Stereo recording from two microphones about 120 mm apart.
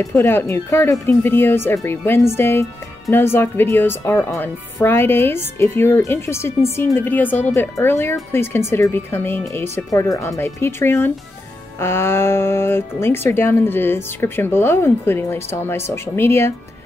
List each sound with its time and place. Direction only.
0.0 s speech: 20° left (ahead or behind)